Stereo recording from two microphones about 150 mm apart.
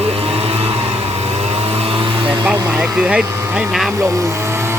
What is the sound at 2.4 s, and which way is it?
Speech, 5° right (ahead or behind).